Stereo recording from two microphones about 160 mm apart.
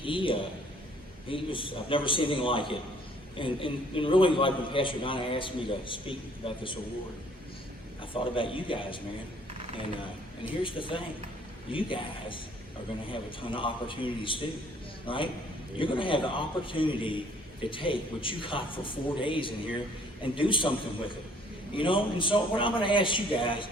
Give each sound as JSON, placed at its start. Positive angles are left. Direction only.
{"t": 0.0, "sound": "a man's voice", "side_deg": 35}
{"t": 8.1, "sound": "a man's voice", "side_deg": 35}
{"t": 10.6, "sound": "a man's voice", "side_deg": 30}